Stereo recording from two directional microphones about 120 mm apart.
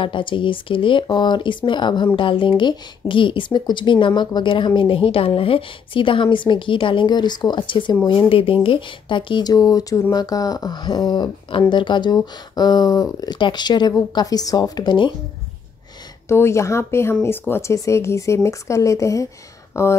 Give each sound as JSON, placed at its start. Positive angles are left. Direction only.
{"t": 0.0, "sound": "speech", "side_deg": 45}
{"t": 16.3, "sound": "speech", "side_deg": 20}